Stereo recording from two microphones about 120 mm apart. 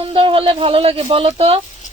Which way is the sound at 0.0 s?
45° right (ahead or behind).